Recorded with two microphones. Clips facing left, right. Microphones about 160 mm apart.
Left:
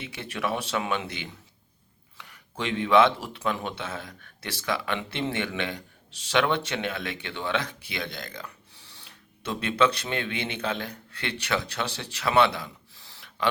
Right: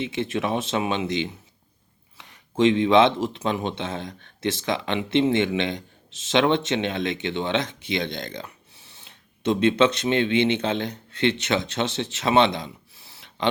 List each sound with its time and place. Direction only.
0.0 s speech: 20° right (ahead or behind)